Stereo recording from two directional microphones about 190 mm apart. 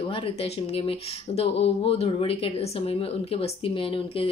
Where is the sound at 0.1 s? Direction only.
30° left (ahead or behind).